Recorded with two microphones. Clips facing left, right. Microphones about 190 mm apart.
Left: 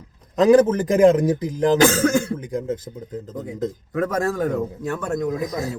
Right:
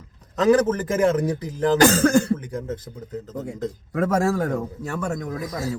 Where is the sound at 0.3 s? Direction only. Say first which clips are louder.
Left 4 dB; 15° left (ahead or behind).